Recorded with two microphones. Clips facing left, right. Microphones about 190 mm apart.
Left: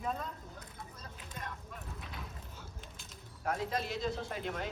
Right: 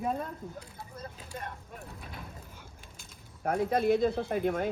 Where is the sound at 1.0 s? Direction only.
50° right (ahead or behind).